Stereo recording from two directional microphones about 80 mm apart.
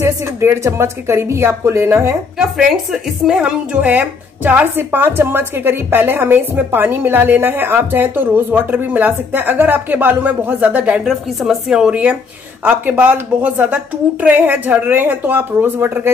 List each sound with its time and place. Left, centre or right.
0.0 s a woman's voice: right
2.3 s a woman's voice: centre; by 16.1 s right